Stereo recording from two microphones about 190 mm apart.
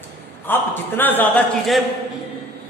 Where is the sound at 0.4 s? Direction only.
10° left (ahead or behind).